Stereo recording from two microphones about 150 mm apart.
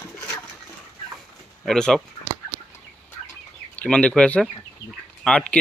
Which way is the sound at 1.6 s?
5° left (ahead or behind).